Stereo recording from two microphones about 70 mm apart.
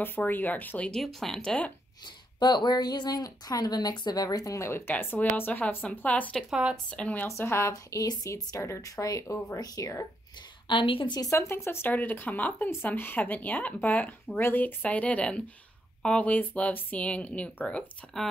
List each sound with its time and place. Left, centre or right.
0.0 s speech: left
0.9 s speech: centre
2.4 s a woman's voice: left
4.6 s speech: left
6.5 s a woman's voice: centre
6.9 s speech: centre
7.2 s speech: left
7.7 s speech: left
11.2 s speech: left; by 17.8 s centre